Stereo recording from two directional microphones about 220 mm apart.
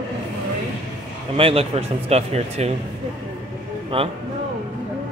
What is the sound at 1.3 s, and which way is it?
Speech, 25° right (ahead or behind).